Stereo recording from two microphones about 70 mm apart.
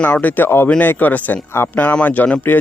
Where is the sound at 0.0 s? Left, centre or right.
Left.